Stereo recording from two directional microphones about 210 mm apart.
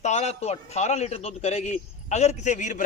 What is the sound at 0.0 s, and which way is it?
A man's voice, 30° left (ahead or behind).